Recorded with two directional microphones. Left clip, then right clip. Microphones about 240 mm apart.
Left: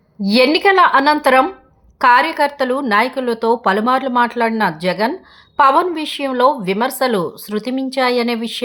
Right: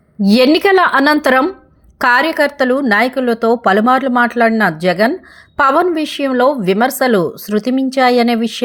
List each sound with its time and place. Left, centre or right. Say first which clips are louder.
0.3 s speech: right 2 dB; centre